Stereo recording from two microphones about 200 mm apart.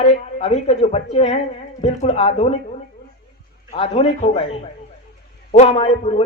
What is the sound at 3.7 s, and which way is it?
A man's voice, 30° left (ahead or behind).